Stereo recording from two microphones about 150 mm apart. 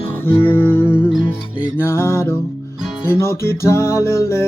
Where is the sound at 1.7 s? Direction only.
15° left (ahead or behind).